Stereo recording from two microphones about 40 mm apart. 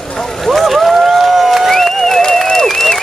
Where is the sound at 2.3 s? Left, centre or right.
Centre.